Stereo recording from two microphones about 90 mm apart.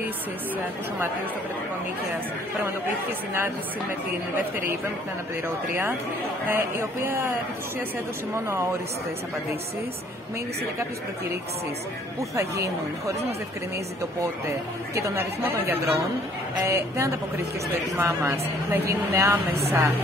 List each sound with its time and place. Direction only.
4.4 s a woman's voice: 25° right (ahead or behind)
6.4 s a woman's voice: 25° right (ahead or behind)
12.2 s speech: 35° right (ahead or behind)
15.0 s a woman's voice: 30° right (ahead or behind)